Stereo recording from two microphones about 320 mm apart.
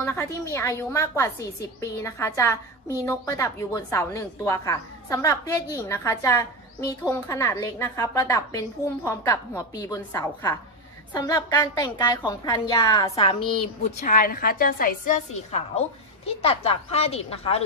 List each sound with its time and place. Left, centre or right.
0.0 s a woman's voice: centre